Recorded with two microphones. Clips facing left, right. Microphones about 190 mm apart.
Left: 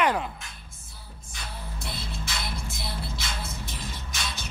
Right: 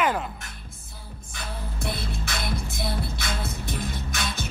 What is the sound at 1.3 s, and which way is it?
Music, 55° right (ahead or behind).